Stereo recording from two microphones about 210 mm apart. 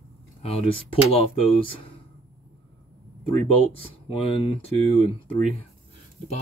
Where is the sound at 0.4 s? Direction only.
30° left (ahead or behind).